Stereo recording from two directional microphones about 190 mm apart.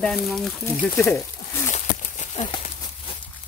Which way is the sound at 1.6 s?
40° left (ahead or behind).